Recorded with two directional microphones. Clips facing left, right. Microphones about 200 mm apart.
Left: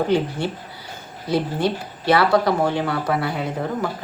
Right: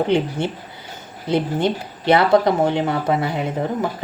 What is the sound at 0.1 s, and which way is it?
Speech, 20° right (ahead or behind).